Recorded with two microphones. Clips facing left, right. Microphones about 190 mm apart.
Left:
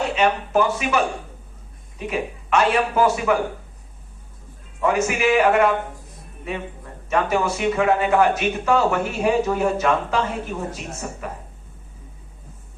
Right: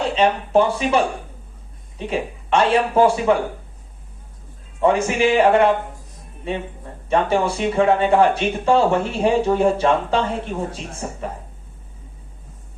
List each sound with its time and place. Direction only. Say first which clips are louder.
0.2 s speech: right 3 dB; 30° right (ahead or behind)
4.8 s speech: right 3 dB; 30° right (ahead or behind)